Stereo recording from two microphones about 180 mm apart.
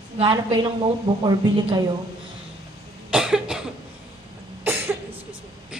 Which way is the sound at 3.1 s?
5° right (ahead or behind).